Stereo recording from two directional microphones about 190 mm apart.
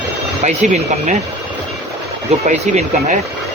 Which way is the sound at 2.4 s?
40° right (ahead or behind).